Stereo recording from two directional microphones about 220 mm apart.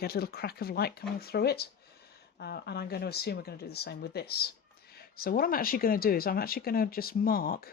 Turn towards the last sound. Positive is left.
turn(degrees=40)  # may be behind; listen again after turning